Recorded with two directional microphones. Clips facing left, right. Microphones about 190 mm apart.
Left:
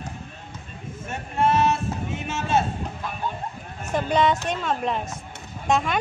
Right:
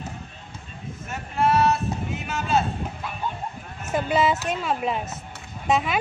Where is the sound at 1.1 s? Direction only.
25° left (ahead or behind).